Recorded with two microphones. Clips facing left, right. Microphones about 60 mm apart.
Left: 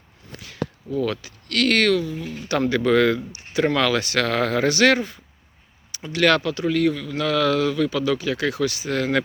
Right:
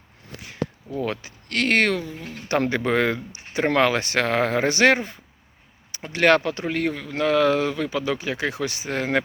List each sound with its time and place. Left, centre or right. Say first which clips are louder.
0.3 s speech: even; right